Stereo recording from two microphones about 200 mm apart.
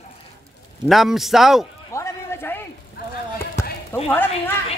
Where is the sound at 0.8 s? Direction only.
Centre (ahead or behind).